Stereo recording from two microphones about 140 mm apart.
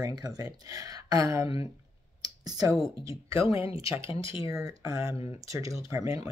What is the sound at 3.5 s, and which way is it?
Speech, 40° left (ahead or behind).